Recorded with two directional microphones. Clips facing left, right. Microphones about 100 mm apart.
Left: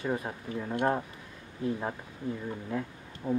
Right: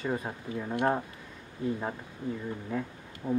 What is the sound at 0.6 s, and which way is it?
Speech, 10° right (ahead or behind).